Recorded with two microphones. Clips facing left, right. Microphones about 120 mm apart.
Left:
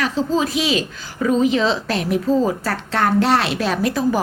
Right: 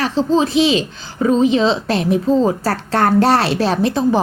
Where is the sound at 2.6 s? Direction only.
40° right (ahead or behind).